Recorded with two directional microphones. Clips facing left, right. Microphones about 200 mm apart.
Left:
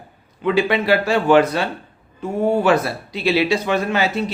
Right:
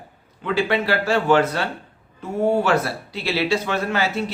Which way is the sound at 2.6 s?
15° left (ahead or behind).